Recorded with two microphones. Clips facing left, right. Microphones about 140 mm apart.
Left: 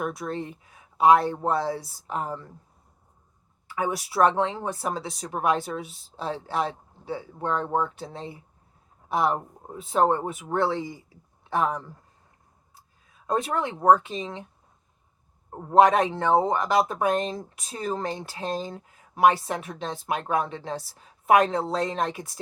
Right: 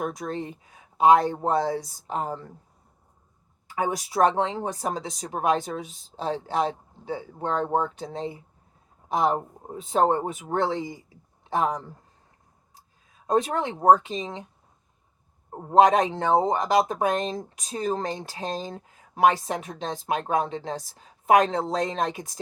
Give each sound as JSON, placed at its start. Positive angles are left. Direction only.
{"t": 0.0, "sound": "speech", "side_deg": -20}
{"t": 1.5, "sound": "speech", "side_deg": -45}
{"t": 2.0, "sound": "speech", "side_deg": -25}
{"t": 2.2, "sound": "speech", "side_deg": -40}
{"t": 3.8, "sound": "speech", "side_deg": -20}
{"t": 13.2, "sound": "speech", "side_deg": -20}
{"t": 15.5, "sound": "speech", "side_deg": -20}